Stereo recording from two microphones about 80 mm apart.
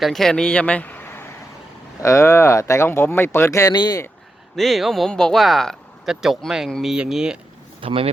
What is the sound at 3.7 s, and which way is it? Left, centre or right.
Speech, left.